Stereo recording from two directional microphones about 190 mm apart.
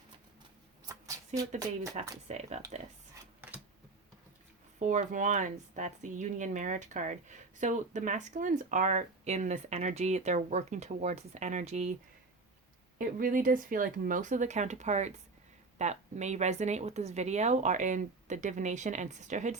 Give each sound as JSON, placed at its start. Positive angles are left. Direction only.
{"t": 1.4, "sound": "speech", "side_deg": -20}
{"t": 2.2, "sound": "speech", "side_deg": -35}
{"t": 4.8, "sound": "speech", "side_deg": -40}
{"t": 13.0, "sound": "speech", "side_deg": -45}